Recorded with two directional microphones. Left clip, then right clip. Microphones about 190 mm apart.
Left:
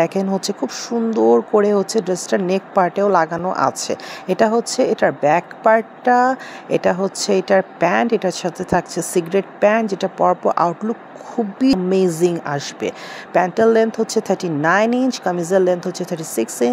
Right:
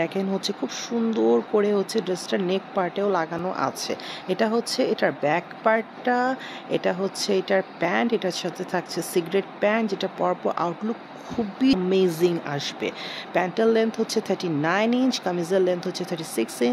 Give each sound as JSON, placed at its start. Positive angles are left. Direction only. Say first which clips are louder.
{"t": 0.0, "sound": "speech", "louder": "left 7 dB", "side_deg": 30}